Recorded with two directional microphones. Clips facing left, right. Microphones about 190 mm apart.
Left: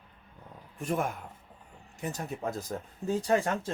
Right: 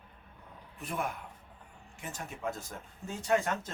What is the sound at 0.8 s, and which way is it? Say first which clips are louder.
Speech: left 5 dB; 45° left (ahead or behind).